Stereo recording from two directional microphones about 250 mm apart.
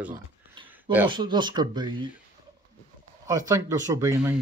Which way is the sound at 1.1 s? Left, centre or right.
Centre.